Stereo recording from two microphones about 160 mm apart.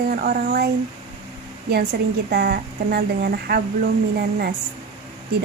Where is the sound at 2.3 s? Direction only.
85° right; by 3.9 s 70° right (ahead or behind).